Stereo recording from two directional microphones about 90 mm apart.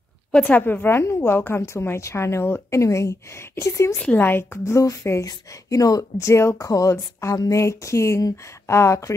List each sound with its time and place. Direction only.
0.3 s a woman's voice: 20° left (ahead or behind)